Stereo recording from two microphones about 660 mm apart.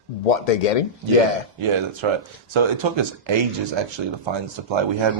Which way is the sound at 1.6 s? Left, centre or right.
Right.